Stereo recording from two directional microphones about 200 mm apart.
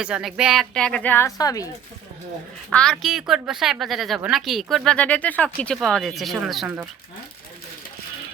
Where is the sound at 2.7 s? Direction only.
5° left (ahead or behind).